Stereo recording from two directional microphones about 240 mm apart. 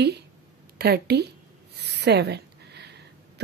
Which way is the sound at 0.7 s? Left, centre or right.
Right.